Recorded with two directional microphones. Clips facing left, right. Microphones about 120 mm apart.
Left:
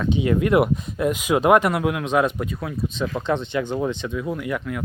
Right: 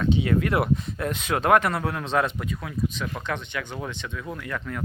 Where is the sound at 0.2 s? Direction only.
20° left (ahead or behind).